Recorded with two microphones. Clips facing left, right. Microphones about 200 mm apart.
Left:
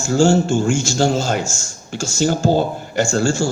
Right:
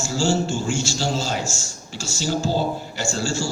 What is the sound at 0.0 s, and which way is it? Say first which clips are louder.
A man's voice: left 7 dB; 50° left (ahead or behind).